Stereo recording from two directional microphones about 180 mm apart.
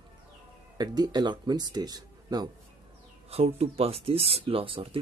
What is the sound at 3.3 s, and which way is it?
Speech, 35° right (ahead or behind).